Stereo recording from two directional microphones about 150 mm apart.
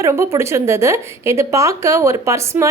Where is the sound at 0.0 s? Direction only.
20° right (ahead or behind).